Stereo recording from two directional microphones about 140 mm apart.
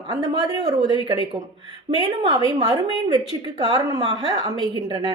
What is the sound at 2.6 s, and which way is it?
A woman's voice, 30° right (ahead or behind).